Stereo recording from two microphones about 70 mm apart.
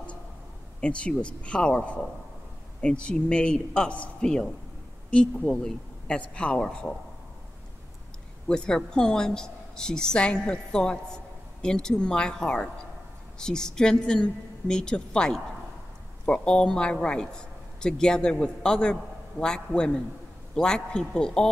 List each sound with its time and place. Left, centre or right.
0.7 s a woman's voice: centre
8.5 s a woman's voice: centre